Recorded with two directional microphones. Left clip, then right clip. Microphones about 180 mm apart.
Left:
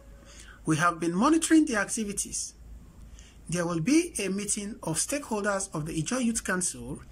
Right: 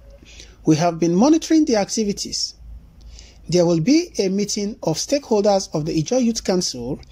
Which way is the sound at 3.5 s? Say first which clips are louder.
Right 12 dB; 20° right (ahead or behind).